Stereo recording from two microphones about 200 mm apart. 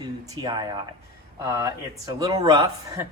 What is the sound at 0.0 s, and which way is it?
Speech, 20° right (ahead or behind).